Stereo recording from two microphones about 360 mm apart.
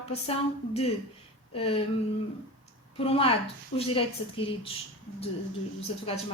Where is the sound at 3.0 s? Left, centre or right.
Centre.